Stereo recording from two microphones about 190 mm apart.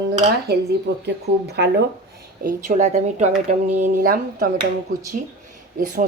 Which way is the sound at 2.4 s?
40° right (ahead or behind).